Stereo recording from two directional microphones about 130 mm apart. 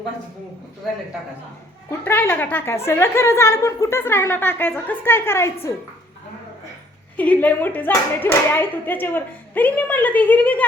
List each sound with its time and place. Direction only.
1.9 s a woman's voice: 20° left (ahead or behind)
7.2 s speech: 10° left (ahead or behind)